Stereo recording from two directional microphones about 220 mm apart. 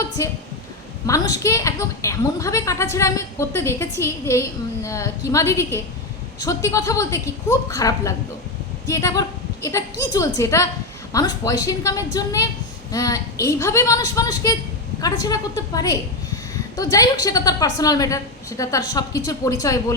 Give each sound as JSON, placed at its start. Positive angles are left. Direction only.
{"t": 1.0, "sound": "a woman's voice", "side_deg": 15}